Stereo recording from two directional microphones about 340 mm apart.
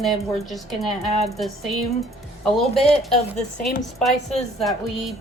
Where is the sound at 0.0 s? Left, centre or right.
Centre.